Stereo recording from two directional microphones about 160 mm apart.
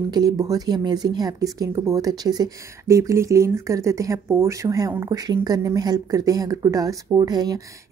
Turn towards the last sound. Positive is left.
turn(degrees=-25)  # may be behind; listen again after turning